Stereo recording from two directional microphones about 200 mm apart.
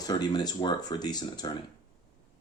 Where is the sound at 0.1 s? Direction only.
20° left (ahead or behind).